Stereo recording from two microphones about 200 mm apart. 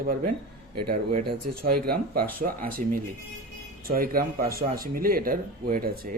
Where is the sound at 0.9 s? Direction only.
50° right (ahead or behind).